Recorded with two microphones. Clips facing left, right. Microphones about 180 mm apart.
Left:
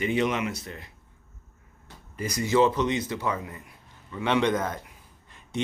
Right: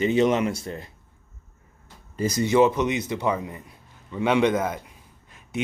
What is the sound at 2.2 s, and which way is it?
Speech, 25° right (ahead or behind).